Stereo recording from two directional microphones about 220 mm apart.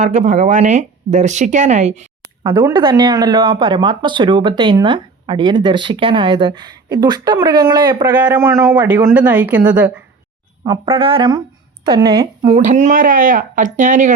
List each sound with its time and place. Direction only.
0.0 s speech: 30° right (ahead or behind)
2.4 s speech: 15° right (ahead or behind)
8.0 s a man's voice: 10° right (ahead or behind)
10.6 s speech: 25° right (ahead or behind)